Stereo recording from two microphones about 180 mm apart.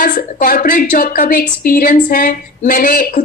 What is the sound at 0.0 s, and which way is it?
A woman's voice, 50° left (ahead or behind).